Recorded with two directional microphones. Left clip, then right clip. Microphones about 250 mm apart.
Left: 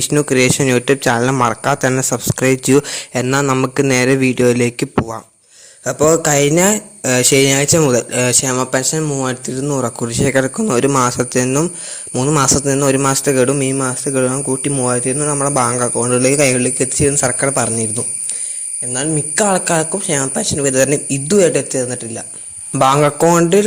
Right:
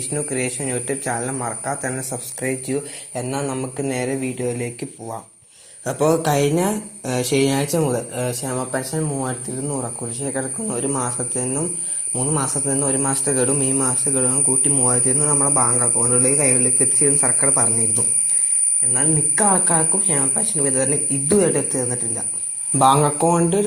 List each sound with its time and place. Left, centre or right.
0.1 s speech: left
5.8 s speech: left
18.9 s speech: left